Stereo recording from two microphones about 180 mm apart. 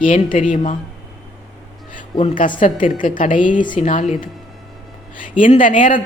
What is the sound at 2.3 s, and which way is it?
A man's voice, 50° left (ahead or behind).